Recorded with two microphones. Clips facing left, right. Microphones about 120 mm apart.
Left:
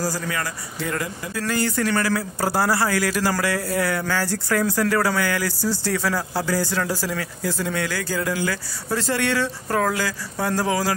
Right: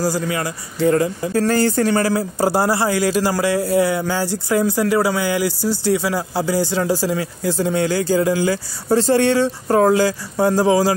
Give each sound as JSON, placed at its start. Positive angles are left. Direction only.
{"t": 0.0, "sound": "speech", "side_deg": -20}